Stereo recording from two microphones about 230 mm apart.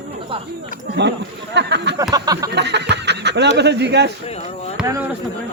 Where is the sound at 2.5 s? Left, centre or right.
Right.